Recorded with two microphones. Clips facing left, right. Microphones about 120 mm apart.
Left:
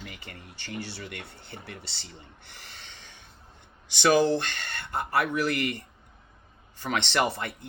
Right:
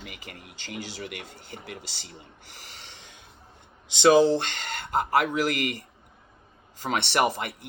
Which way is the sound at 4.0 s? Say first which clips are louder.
Right 4 dB; 20° right (ahead or behind).